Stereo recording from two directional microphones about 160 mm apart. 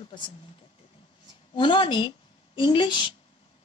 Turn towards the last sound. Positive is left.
turn(degrees=30)  # may be behind; listen again after turning